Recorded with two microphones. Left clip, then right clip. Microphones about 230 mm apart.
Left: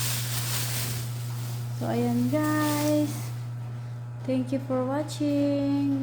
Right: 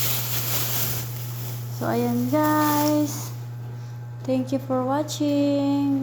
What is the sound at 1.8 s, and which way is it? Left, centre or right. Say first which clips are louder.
Speech: right 3 dB; centre.